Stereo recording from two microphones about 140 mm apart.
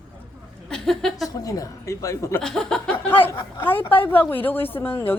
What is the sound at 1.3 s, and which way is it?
A woman's voice, 25° left (ahead or behind).